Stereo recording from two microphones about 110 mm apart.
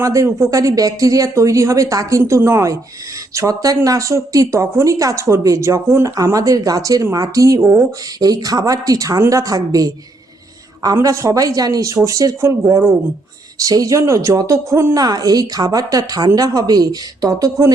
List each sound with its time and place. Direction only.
0.0 s speech: 30° right (ahead or behind)
10.9 s speech: 30° right (ahead or behind)